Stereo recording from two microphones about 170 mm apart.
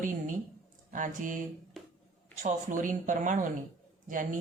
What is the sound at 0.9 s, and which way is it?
Speech, 50° right (ahead or behind).